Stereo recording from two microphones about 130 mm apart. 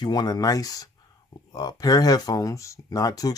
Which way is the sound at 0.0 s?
30° left (ahead or behind).